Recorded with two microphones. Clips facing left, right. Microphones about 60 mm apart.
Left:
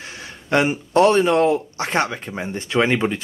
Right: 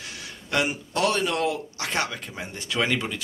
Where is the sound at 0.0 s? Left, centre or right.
Left.